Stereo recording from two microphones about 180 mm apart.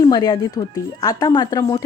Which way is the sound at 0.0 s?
20° left (ahead or behind).